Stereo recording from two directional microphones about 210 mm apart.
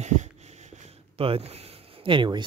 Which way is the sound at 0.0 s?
35° right (ahead or behind).